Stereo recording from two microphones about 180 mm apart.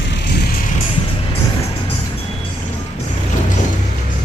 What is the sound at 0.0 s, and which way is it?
Music, 65° left (ahead or behind).